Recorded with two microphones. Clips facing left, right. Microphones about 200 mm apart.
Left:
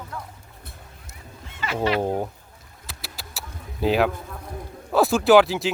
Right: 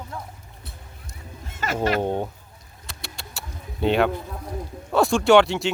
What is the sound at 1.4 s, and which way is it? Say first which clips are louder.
Music: even; 45° right (ahead or behind).